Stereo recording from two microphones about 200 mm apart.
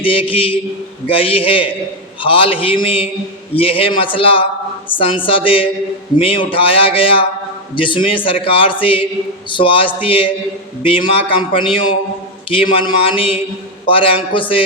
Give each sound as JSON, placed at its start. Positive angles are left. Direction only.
{"t": 0.0, "sound": "a man's voice", "side_deg": 25}